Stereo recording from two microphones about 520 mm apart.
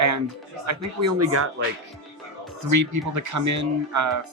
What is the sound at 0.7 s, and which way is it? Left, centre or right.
Speech, right.